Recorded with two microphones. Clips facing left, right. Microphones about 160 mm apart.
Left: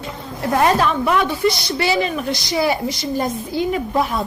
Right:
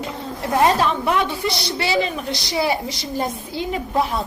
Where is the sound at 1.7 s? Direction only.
30° right (ahead or behind).